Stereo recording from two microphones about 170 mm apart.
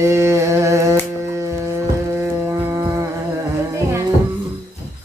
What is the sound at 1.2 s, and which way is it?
Music, 15° right (ahead or behind).